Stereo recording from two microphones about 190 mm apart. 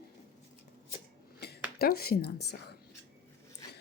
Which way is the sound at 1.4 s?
60° left (ahead or behind).